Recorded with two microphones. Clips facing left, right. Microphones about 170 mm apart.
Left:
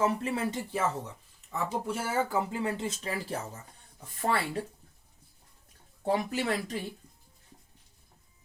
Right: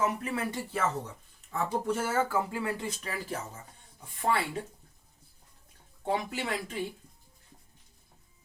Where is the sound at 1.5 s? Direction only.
10° left (ahead or behind).